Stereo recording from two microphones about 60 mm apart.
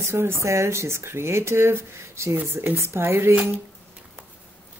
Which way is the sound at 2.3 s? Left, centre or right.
Right.